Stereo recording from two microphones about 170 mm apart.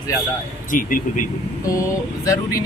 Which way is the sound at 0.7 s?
55° left (ahead or behind).